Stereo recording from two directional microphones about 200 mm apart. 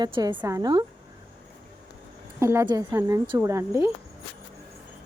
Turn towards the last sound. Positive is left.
turn(degrees=-15)  # may be behind; listen again after turning